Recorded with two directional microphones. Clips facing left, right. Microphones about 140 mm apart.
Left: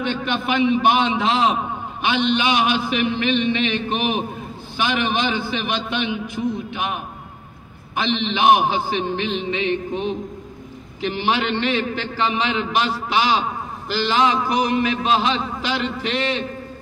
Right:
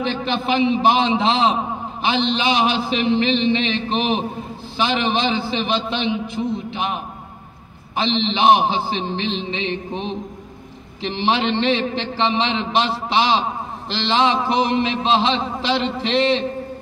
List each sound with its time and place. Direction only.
0.0 s a man's voice: 30° right (ahead or behind)